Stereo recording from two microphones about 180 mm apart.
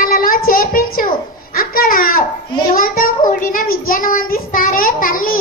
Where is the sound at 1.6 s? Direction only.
50° left (ahead or behind).